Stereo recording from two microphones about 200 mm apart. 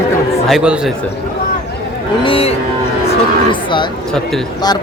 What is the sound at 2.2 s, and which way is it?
Speech, 30° left (ahead or behind).